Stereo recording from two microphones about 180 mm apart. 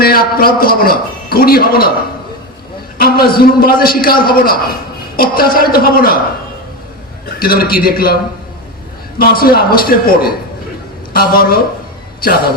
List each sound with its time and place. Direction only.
0.0 s a man's voice: 55° left (ahead or behind)
3.0 s a man's voice: 55° left (ahead or behind)
7.3 s a man's voice: 55° left (ahead or behind)